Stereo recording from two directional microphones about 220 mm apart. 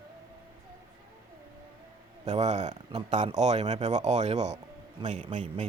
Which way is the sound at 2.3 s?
30° right (ahead or behind).